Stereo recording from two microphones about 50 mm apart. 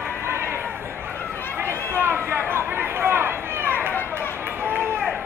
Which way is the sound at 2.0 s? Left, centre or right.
Right.